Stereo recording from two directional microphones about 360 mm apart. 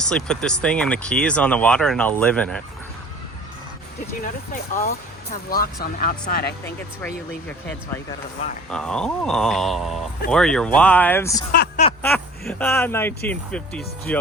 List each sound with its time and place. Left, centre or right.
0.0 s speech: centre
4.8 s speech: left
8.7 s speech: centre
11.5 s a sound: left
11.9 s speech: centre